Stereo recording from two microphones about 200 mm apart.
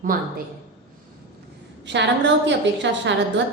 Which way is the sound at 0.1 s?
45° right (ahead or behind).